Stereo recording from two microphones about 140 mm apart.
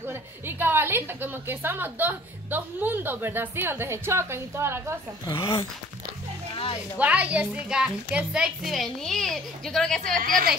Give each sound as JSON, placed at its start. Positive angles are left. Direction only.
{"t": 0.0, "sound": "a woman's voice", "side_deg": -15}
{"t": 5.2, "sound": "speech", "side_deg": 20}
{"t": 7.0, "sound": "a woman's voice", "side_deg": -10}
{"t": 10.2, "sound": "a woman's voice", "side_deg": -85}